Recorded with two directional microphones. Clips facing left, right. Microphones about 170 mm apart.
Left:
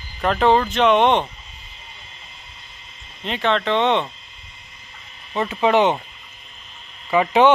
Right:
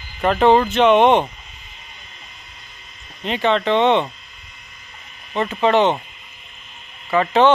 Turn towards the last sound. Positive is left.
turn(degrees=10)  # may be behind; listen again after turning